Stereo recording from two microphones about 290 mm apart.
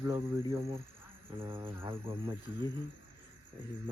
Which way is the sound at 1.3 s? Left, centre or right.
Centre.